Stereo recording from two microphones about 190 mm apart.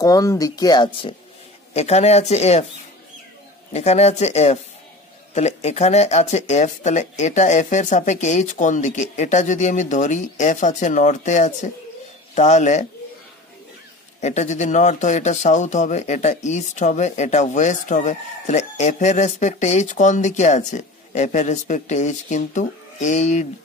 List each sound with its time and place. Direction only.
0.0 s speech: 20° left (ahead or behind)
1.7 s speech: 35° left (ahead or behind)
3.7 s speech: 35° left (ahead or behind)
14.2 s speech: 40° left (ahead or behind)